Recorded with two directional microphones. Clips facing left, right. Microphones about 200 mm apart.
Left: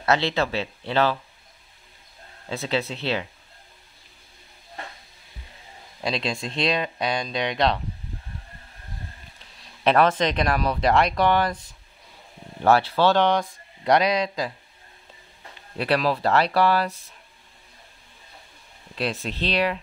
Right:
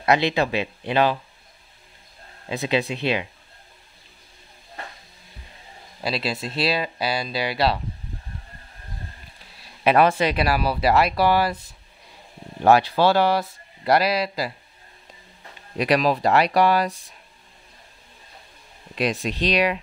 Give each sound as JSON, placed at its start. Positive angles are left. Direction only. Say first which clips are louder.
{"t": 0.0, "sound": "speech", "louder": "right 2 dB", "side_deg": -15}
{"t": 2.4, "sound": "speech", "louder": "right 3 dB", "side_deg": -15}
{"t": 5.9, "sound": "speech", "louder": "right 1 dB", "side_deg": -5}
{"t": 9.6, "sound": "speech", "louder": "right 2 dB", "side_deg": -10}
{"t": 15.8, "sound": "speech", "louder": "right 3 dB", "side_deg": -15}
{"t": 18.9, "sound": "speech", "louder": "right 4 dB", "side_deg": -15}